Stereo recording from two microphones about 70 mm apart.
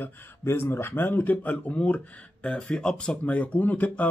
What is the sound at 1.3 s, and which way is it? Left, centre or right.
Speech, centre.